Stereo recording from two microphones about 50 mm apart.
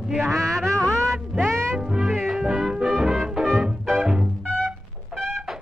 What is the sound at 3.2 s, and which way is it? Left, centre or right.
Music, centre.